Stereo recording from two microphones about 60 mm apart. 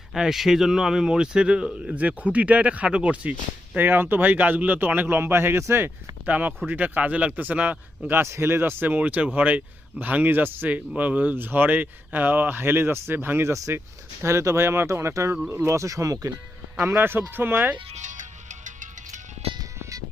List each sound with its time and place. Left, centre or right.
0.1 s speech: centre; by 3.3 s right
3.8 s speech: right
6.2 s speech: right
8.2 s speech: right
8.9 s speech: right
13.4 s speech: right
16.8 s speech: right